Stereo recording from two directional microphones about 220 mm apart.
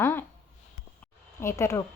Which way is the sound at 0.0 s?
10° left (ahead or behind).